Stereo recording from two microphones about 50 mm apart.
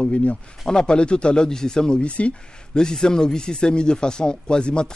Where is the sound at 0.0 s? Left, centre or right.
Left.